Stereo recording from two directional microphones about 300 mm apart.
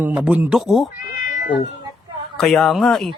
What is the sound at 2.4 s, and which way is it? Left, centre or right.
Speech, centre.